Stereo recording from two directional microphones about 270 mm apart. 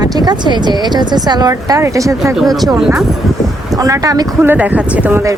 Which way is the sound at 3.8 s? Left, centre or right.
Centre.